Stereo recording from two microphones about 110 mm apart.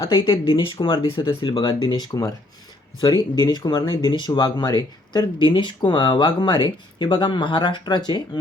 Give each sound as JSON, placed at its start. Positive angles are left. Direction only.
{"t": 0.2, "sound": "speech", "side_deg": 50}